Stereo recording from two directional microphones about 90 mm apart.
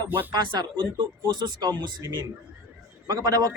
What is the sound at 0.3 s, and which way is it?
Speech, 55° right (ahead or behind).